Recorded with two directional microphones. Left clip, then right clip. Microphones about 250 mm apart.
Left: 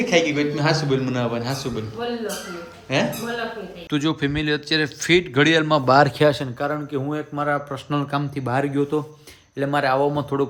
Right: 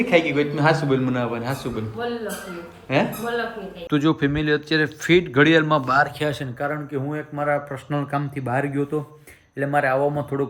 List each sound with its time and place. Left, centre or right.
0.0 s a man's voice: centre
6.1 s speech: left
6.4 s speech: centre